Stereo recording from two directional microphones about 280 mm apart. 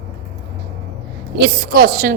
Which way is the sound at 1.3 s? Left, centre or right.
Right.